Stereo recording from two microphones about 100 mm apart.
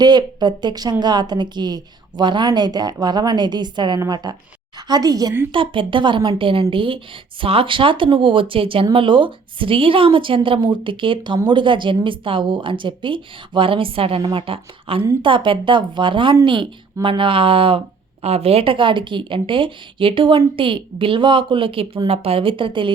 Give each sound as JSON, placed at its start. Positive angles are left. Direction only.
{"t": 0.0, "sound": "a woman's voice", "side_deg": -45}
{"t": 5.5, "sound": "speech", "side_deg": -55}